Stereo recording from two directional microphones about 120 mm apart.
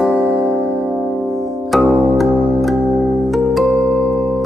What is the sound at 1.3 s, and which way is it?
Music, centre (ahead or behind).